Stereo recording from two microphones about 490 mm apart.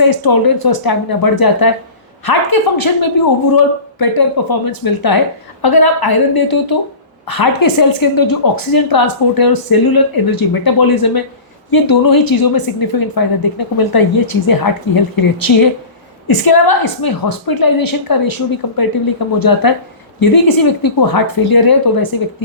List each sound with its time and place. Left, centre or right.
0.0 s a woman's voice: left